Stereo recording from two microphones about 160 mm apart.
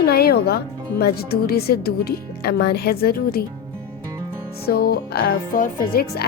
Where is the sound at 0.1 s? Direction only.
75° left (ahead or behind).